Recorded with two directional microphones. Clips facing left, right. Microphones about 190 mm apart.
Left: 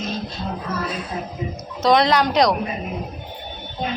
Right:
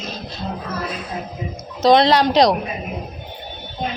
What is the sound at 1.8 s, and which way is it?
Speech, 30° right (ahead or behind).